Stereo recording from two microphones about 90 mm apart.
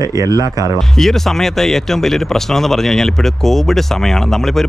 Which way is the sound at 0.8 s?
5° left (ahead or behind).